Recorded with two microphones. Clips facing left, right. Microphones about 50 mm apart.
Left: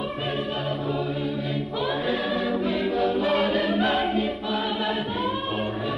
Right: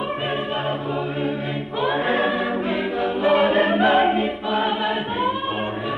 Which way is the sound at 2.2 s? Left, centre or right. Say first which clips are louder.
Right 3 dB; centre.